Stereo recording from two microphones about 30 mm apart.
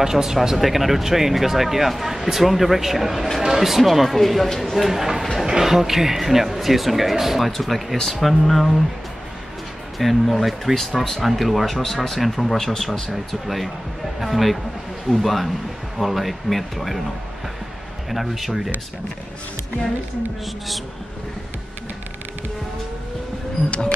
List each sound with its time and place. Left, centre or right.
0.0 s speech: centre
9.9 s speech: centre
18.1 s speech: centre